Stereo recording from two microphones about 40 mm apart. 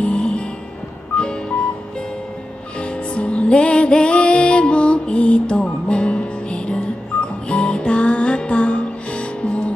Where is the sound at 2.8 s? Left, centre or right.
Left.